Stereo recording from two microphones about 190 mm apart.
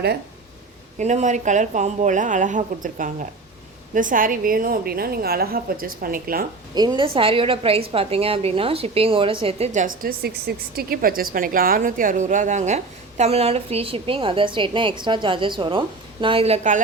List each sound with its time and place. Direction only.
0.9 s a woman's voice: 40° right (ahead or behind)
6.7 s a woman's voice: 25° right (ahead or behind)